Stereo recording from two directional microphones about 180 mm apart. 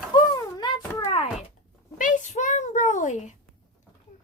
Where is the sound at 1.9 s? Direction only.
45° left (ahead or behind).